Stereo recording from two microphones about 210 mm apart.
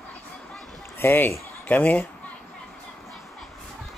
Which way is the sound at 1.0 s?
10° left (ahead or behind).